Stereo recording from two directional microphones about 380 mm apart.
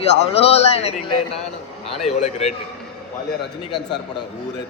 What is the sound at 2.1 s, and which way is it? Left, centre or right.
Speech, centre.